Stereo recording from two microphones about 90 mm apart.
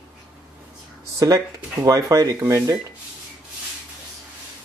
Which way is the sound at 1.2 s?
40° right (ahead or behind).